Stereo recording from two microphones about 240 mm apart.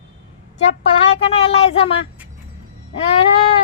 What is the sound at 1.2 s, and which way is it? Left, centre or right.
Speech, left.